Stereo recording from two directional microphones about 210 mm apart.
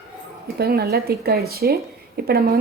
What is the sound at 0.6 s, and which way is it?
Speech, 45° right (ahead or behind).